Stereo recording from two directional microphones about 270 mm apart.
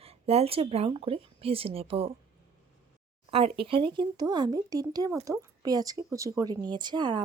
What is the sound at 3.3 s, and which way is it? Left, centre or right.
Speech, centre.